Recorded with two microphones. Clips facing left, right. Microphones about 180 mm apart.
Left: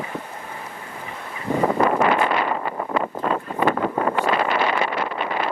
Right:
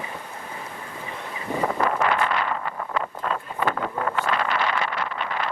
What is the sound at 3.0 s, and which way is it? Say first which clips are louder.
Vehicle: left 5 dB; 20° left (ahead or behind).